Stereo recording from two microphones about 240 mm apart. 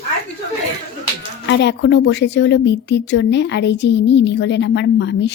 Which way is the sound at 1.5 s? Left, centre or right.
Left.